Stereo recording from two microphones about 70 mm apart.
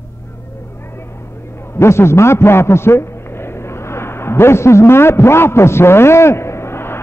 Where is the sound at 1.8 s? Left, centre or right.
Left.